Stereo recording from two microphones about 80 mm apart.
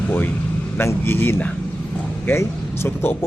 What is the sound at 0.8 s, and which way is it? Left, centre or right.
A man's voice, left.